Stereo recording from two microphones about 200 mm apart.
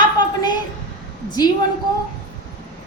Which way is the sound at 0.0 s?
20° left (ahead or behind).